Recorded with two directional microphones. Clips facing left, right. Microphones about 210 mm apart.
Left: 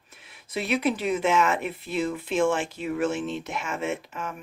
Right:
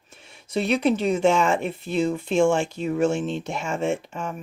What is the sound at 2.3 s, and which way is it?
Speech, centre (ahead or behind).